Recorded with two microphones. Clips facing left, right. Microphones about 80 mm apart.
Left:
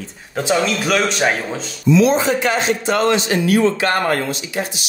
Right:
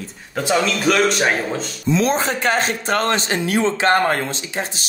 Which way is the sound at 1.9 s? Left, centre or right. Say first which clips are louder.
Left 5 dB; right.